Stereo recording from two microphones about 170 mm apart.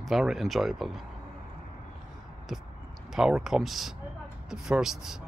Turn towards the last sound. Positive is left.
turn(degrees=-5)  # may be behind; listen again after turning